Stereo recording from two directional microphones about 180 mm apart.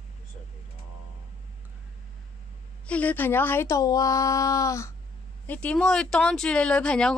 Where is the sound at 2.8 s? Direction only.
10° left (ahead or behind).